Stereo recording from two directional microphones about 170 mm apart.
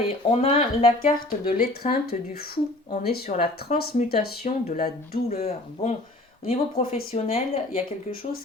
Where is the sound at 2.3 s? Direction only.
65° left (ahead or behind).